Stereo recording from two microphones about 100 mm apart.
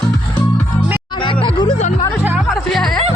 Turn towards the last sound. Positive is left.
turn(degrees=0)  # may be behind; listen again after turning